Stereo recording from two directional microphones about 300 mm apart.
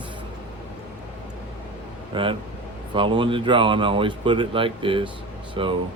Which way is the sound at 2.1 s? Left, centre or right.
Centre.